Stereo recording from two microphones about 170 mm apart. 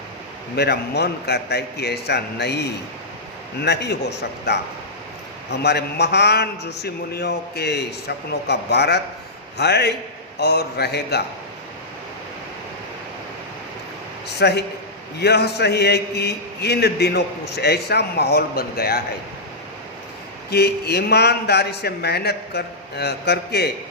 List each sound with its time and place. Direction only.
0.5 s a man's voice: 75° left (ahead or behind)
5.5 s a man's voice: 75° left (ahead or behind)
14.3 s a man's voice: 80° left
20.5 s a man's voice: 70° left (ahead or behind)